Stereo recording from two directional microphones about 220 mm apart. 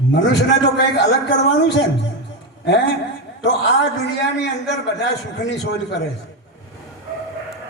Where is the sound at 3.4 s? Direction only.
50° left (ahead or behind).